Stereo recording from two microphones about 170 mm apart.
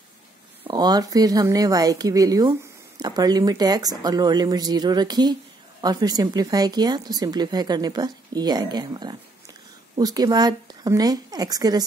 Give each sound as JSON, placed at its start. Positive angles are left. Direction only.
{"t": 0.7, "sound": "speech", "side_deg": -25}